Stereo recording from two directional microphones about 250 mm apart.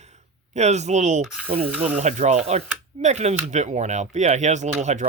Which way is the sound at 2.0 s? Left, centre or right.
Right.